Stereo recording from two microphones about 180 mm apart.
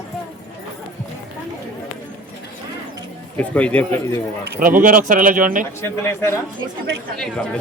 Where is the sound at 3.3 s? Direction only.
10° left (ahead or behind).